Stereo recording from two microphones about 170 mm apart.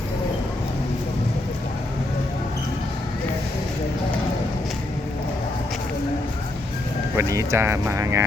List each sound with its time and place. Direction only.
7.2 s speech: 15° right (ahead or behind)